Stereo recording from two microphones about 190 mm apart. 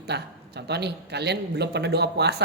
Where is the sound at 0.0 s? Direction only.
60° right (ahead or behind).